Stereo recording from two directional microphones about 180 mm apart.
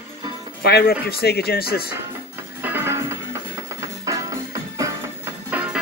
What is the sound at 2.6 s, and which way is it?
Music, 10° right (ahead or behind).